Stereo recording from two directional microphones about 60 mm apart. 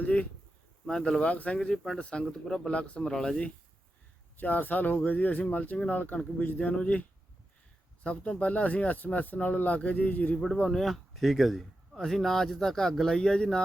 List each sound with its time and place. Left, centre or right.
0.0 s a sound: left
0.9 s speech: centre
1.2 s speech: left
4.4 s a man's voice: left
8.0 s speech: centre
10.7 s speech: centre